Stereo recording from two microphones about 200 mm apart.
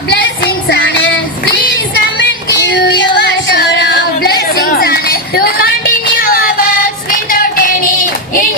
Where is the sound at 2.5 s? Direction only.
55° left (ahead or behind).